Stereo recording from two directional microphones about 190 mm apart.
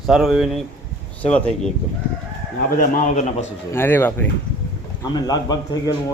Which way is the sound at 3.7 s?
10° left (ahead or behind).